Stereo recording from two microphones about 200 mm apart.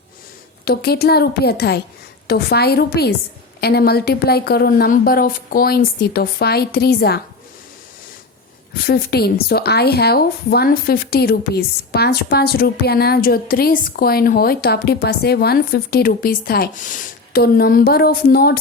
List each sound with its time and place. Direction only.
0.6 s a woman's voice: 50° left (ahead or behind)
8.7 s a woman's voice: 50° left (ahead or behind)